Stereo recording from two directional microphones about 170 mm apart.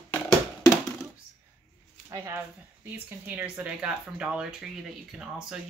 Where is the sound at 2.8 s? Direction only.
10° right (ahead or behind).